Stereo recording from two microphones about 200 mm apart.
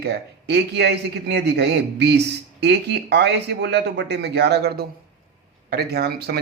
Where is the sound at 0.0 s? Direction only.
55° right (ahead or behind).